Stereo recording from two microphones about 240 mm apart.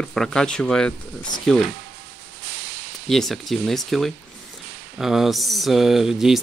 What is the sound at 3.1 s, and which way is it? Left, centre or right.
Speech, centre.